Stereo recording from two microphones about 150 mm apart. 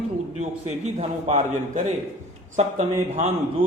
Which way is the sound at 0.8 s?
50° right (ahead or behind).